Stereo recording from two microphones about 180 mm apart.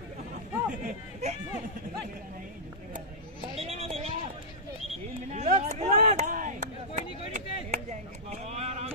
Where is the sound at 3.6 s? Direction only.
35° right (ahead or behind).